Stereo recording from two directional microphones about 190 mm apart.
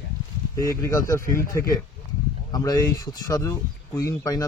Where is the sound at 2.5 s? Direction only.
20° left (ahead or behind).